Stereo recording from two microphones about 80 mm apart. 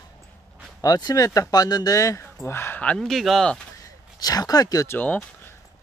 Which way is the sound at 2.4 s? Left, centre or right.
Left.